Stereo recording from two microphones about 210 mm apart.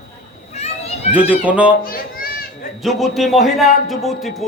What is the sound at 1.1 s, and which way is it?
Speech, 5° right (ahead or behind).